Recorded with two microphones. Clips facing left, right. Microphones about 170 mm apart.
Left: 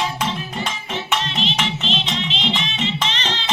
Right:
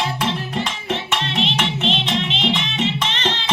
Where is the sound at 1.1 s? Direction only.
65° right (ahead or behind).